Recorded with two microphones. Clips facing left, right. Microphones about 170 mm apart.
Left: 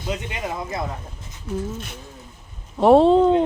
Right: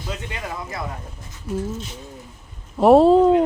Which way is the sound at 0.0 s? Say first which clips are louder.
Left 3 dB; 20° left (ahead or behind).